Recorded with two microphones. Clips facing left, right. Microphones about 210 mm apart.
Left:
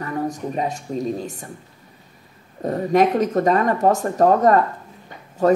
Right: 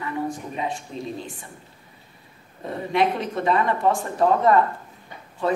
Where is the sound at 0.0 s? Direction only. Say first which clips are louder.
Left 3 dB; 40° left (ahead or behind).